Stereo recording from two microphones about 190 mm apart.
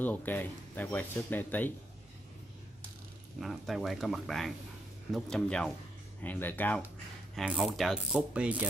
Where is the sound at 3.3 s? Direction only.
Centre (ahead or behind).